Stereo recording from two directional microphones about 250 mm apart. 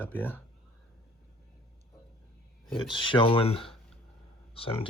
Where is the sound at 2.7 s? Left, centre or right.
Left.